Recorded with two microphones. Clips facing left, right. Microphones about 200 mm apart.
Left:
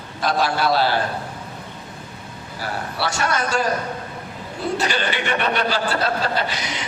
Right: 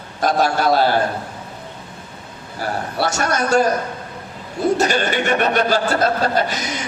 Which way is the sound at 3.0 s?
45° right (ahead or behind).